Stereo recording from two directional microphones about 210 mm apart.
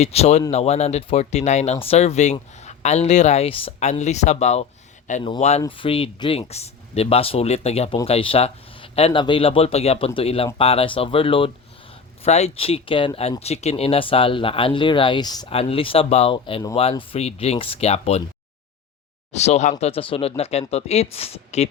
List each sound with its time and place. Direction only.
0.0 s speech: 30° left (ahead or behind)
19.3 s speech: 30° left (ahead or behind)